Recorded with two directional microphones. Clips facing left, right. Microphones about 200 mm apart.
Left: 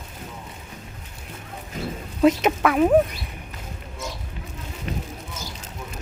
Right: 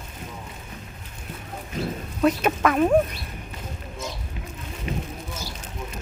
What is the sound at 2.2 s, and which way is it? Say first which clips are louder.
Speech: left 3 dB; 20° left (ahead or behind).